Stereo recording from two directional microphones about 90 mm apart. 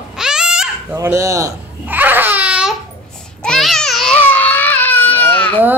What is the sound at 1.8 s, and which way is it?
Baby cry, 20° right (ahead or behind).